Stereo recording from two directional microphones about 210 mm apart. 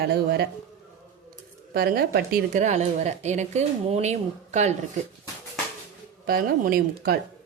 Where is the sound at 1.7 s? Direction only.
45° right (ahead or behind).